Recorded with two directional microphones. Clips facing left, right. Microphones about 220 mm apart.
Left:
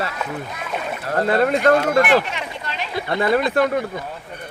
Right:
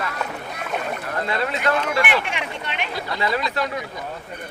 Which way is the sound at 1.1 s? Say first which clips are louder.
Left 9 dB; 45° left (ahead or behind).